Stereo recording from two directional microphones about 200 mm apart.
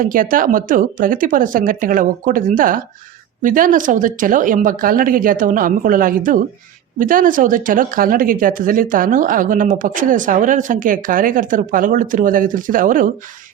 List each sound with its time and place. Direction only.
0.0 s speech: 45° right (ahead or behind)